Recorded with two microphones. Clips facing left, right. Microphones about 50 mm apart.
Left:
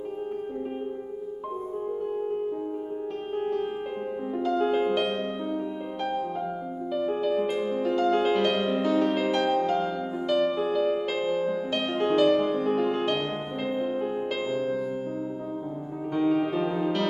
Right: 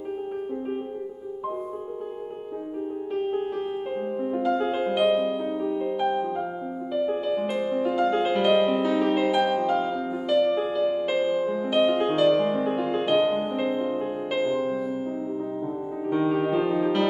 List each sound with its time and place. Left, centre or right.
3.3 s music: centre
16.1 s music: centre